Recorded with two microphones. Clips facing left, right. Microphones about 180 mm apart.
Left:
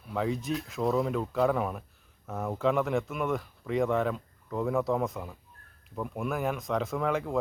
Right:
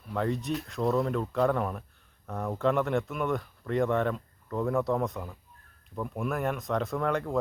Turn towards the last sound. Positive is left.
turn(degrees=0)  # may be behind; listen again after turning